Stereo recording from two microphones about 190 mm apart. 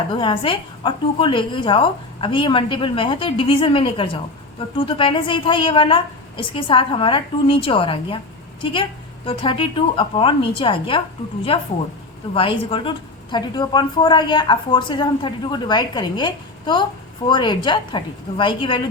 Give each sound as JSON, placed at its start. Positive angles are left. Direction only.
{"t": 0.1, "sound": "a woman's voice", "side_deg": 25}